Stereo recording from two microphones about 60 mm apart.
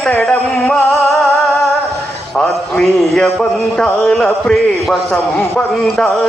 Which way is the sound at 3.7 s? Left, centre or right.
Centre.